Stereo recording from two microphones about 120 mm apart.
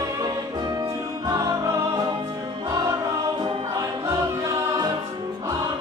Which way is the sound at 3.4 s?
45° right (ahead or behind).